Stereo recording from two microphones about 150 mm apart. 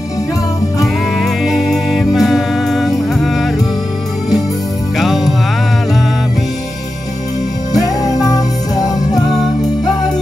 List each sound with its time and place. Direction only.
1.2 s music: centre (ahead or behind)
4.9 s music: centre (ahead or behind)